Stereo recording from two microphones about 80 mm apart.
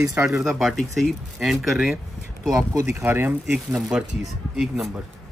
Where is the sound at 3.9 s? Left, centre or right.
Centre.